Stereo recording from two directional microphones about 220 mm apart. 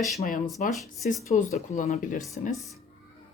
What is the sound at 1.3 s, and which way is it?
Speech, 35° left (ahead or behind).